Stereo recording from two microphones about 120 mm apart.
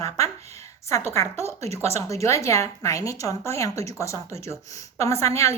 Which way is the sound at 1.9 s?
25° left (ahead or behind).